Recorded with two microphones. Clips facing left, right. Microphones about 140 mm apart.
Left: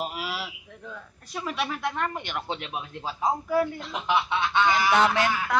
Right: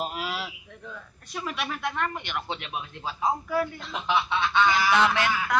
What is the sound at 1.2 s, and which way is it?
Speech, 30° left (ahead or behind).